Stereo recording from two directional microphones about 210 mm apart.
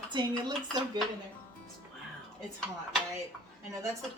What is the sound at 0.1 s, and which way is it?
Speech, 20° right (ahead or behind).